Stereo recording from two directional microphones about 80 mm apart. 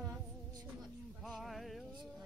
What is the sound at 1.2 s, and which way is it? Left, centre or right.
Speech, centre.